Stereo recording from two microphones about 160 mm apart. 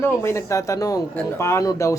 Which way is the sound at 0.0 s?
15° left (ahead or behind).